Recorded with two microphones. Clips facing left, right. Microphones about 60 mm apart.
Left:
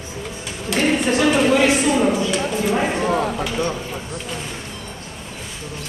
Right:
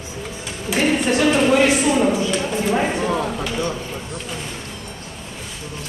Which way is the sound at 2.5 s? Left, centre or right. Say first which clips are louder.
Even; centre.